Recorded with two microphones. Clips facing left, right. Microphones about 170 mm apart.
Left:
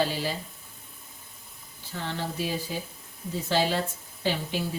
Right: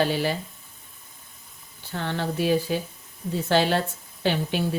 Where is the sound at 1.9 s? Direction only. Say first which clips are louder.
Right 5 dB; 65° right (ahead or behind).